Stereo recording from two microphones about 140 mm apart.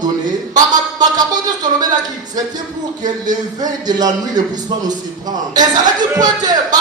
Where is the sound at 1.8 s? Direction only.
30° right (ahead or behind).